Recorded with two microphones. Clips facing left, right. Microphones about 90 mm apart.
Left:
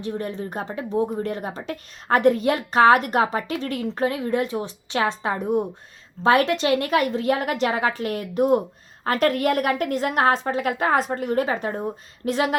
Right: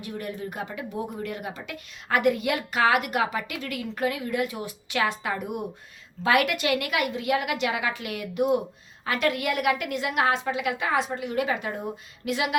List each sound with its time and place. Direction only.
0.0 s speech: 30° left (ahead or behind)